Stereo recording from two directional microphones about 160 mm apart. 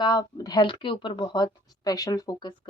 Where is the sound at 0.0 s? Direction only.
25° left (ahead or behind).